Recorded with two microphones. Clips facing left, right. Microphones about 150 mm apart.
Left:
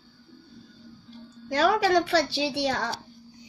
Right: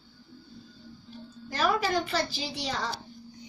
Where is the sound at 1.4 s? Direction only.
90° left; by 2.9 s 65° left (ahead or behind).